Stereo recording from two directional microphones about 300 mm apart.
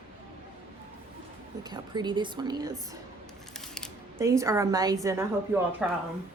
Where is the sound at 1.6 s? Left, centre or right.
Centre.